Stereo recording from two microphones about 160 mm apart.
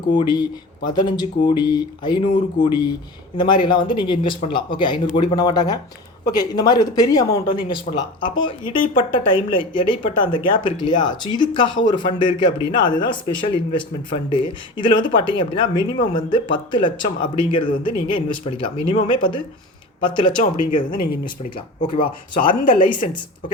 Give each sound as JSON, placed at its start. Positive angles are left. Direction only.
{"t": 0.1, "sound": "speech", "side_deg": 30}
{"t": 22.0, "sound": "speech", "side_deg": 60}